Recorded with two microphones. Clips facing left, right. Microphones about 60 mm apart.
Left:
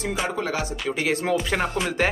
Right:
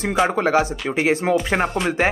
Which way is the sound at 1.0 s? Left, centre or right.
Right.